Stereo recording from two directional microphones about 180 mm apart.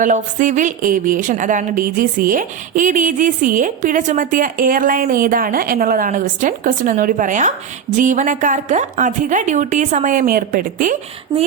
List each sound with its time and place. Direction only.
0.0 s a woman's voice: 45° right (ahead or behind)